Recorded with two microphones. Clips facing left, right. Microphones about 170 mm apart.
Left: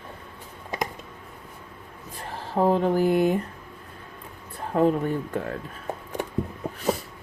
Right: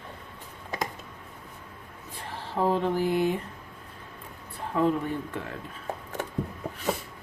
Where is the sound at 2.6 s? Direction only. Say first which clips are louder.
Left 4 dB; 45° left (ahead or behind).